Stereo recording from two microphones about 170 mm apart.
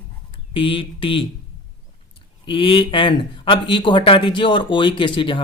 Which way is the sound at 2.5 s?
30° left (ahead or behind).